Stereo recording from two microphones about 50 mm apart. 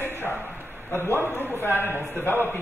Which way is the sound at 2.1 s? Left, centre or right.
Left.